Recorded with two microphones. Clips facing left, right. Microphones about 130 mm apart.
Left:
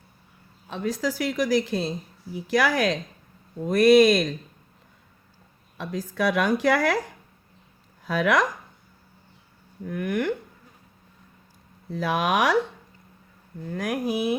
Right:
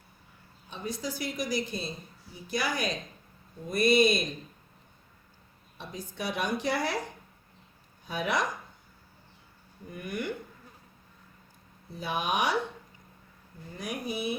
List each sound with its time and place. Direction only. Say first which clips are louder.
0.7 s a woman's voice: left 8 dB; 90° left
5.7 s a woman's voice: left 10 dB; 90° left
8.0 s speech: left 8 dB; 90° left
9.8 s speech: left 9 dB; 80° left
11.9 s a woman's voice: left 7 dB; 90° left
13.7 s a woman's voice: left 9 dB; 90° left